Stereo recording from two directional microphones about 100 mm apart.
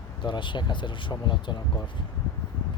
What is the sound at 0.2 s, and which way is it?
Speech, 50° left (ahead or behind).